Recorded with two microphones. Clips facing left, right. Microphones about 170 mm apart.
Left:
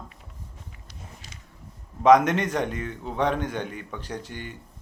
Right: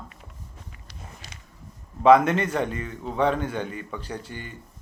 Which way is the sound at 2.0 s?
5° right (ahead or behind).